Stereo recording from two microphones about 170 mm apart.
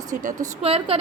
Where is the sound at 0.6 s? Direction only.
35° right (ahead or behind).